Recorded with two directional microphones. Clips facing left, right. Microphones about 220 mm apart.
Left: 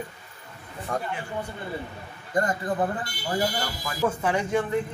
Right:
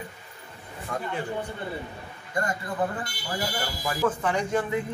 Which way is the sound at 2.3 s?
35° left (ahead or behind).